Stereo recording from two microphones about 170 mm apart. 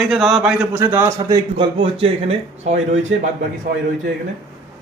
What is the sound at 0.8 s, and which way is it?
A man's voice, 15° right (ahead or behind).